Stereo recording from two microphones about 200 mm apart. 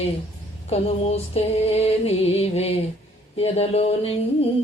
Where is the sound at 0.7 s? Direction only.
30° left (ahead or behind).